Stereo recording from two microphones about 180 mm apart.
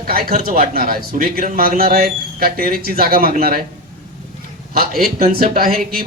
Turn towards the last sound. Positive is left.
turn(degrees=-50)  # may be behind; listen again after turning